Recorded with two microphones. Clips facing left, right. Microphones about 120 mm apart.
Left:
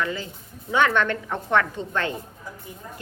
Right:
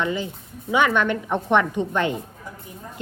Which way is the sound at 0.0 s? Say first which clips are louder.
Right 3 dB; 20° right (ahead or behind).